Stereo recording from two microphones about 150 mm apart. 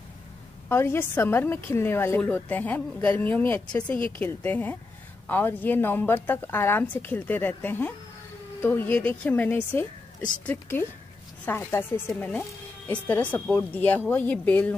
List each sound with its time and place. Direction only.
0.7 s a woman's voice: 15° left (ahead or behind)